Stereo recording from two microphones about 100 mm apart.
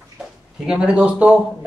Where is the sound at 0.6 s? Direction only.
5° right (ahead or behind).